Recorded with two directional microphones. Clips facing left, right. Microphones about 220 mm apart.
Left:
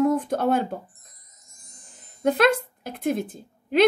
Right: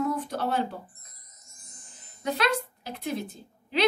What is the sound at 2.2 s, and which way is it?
Speech, 50° left (ahead or behind).